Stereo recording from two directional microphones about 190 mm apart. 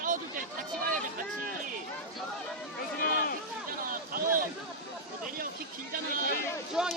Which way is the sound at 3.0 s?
50° left (ahead or behind).